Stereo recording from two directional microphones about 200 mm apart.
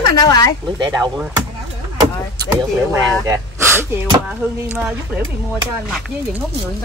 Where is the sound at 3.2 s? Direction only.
15° right (ahead or behind).